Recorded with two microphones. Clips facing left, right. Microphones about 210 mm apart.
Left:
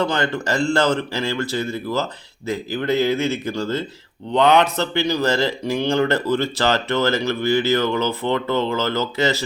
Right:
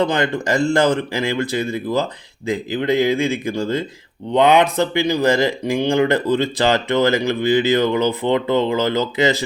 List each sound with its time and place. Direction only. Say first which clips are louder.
0.0 s speech: right 3 dB; 15° right (ahead or behind)